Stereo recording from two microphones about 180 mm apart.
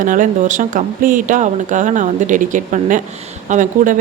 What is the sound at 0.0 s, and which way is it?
A woman's voice, 45° right (ahead or behind).